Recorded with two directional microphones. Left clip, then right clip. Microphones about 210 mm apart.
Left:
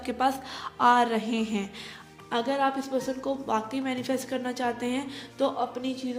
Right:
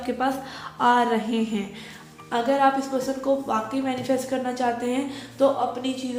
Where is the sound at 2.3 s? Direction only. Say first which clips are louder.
Right 6 dB; 50° left (ahead or behind).